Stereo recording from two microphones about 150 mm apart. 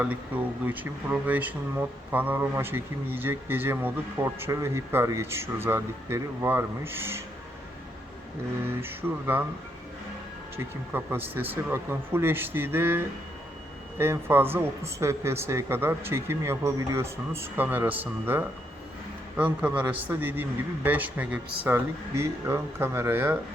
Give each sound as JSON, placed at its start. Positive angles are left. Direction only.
{"t": 0.0, "sound": "speech", "side_deg": -10}
{"t": 8.8, "sound": "speech", "side_deg": -15}
{"t": 10.6, "sound": "speech", "side_deg": -15}